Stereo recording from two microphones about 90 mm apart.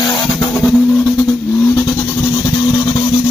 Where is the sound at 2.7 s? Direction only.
50° left (ahead or behind).